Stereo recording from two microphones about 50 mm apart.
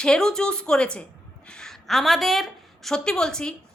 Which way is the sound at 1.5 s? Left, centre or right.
Centre.